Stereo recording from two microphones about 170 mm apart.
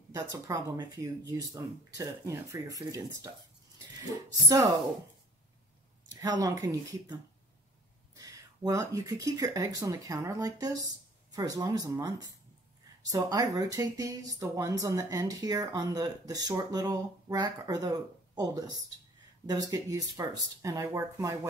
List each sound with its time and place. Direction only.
0.1 s speech: 20° right (ahead or behind)
4.3 s speech: 20° right (ahead or behind)
6.4 s speech: 20° right (ahead or behind)